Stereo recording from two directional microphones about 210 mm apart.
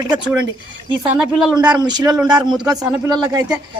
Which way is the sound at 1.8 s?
20° right (ahead or behind).